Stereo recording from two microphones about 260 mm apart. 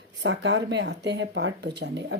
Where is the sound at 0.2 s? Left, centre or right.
Right.